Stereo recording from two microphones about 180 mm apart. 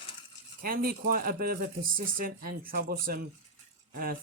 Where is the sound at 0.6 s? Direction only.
55° right (ahead or behind).